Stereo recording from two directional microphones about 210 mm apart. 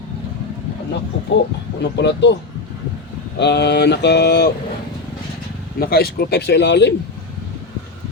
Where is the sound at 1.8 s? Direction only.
55° left (ahead or behind).